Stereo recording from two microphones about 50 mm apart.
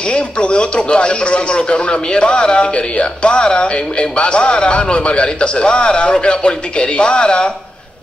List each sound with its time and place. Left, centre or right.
0.1 s speech: left